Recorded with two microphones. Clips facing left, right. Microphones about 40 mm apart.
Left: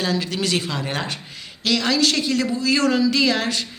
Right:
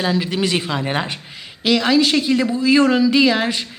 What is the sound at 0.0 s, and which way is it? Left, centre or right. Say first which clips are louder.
A woman's voice: right 4 dB; centre.